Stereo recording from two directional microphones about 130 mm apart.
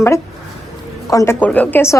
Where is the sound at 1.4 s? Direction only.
10° left (ahead or behind).